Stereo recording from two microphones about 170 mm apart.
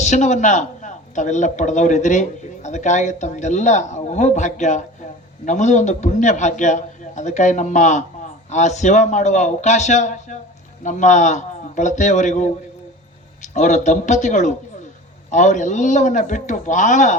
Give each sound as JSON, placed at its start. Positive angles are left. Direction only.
{"t": 0.0, "sound": "a man's voice", "side_deg": 45}
{"t": 13.5, "sound": "a man's voice", "side_deg": 45}